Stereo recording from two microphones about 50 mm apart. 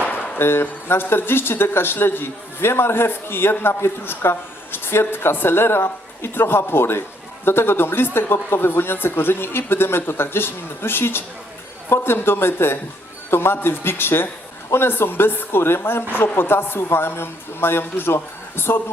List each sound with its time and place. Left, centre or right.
0.3 s speech: left